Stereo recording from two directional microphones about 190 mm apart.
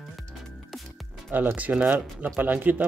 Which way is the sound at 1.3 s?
10° right (ahead or behind).